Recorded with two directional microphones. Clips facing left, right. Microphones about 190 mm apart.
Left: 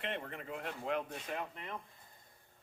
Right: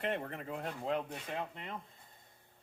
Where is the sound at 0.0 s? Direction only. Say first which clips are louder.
Right 4 dB; 40° right (ahead or behind).